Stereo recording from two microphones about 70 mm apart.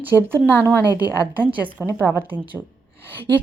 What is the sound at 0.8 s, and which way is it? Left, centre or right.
Speech, left.